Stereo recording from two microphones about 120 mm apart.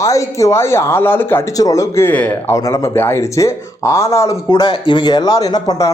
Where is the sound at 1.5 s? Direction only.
30° left (ahead or behind).